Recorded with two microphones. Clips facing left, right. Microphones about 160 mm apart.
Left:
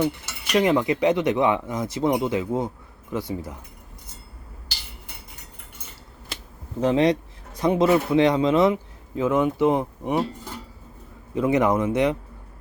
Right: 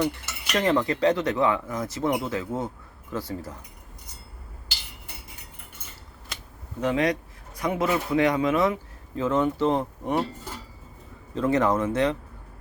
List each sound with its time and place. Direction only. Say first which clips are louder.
0.6 s speech: left 1 dB; 10° left (ahead or behind)
6.7 s speech: left 5 dB; 30° left (ahead or behind); by 10.2 s 10° left (ahead or behind)
11.3 s speech: left 2 dB; 15° left (ahead or behind)